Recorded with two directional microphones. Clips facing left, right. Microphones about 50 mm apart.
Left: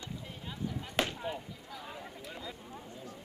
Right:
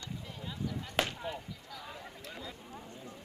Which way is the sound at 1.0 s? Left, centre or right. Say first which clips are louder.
Left 1 dB; centre.